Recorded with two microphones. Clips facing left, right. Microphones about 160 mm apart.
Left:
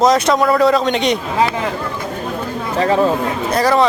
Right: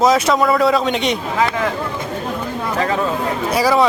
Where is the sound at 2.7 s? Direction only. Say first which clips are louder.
Left 5 dB; 35° left (ahead or behind).